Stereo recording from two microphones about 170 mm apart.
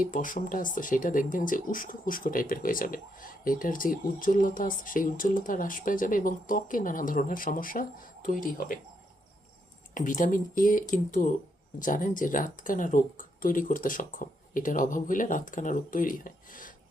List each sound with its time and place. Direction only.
0.0 s speech: 50° left (ahead or behind)
9.9 s speech: 50° left (ahead or behind)